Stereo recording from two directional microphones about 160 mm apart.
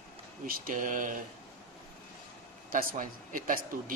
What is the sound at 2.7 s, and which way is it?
Speech, 55° right (ahead or behind).